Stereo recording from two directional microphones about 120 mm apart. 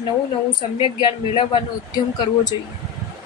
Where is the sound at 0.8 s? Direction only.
50° left (ahead or behind).